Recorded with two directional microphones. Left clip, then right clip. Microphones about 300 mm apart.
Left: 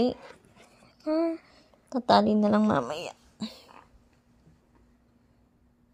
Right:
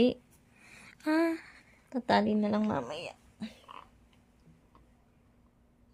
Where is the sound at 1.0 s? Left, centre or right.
Right.